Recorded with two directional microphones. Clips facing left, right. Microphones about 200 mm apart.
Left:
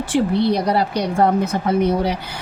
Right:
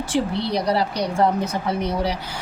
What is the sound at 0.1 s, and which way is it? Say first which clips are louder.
A woman's voice: left 6 dB; 55° left (ahead or behind).